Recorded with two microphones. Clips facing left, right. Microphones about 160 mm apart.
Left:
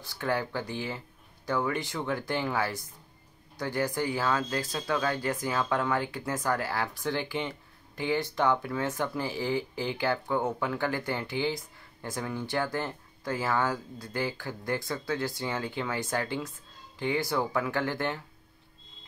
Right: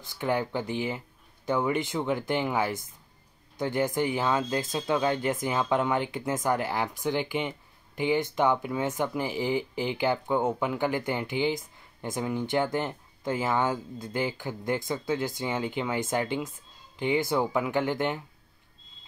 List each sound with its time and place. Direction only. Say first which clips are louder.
0.1 s speech: right 2 dB; 20° right (ahead or behind)